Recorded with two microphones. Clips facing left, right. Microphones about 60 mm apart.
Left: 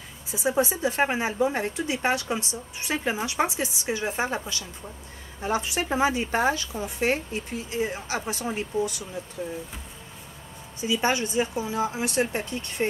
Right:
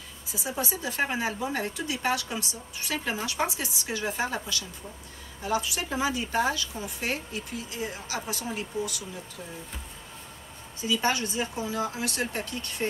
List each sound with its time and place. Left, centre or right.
0.3 s a woman's voice: left
10.8 s speech: left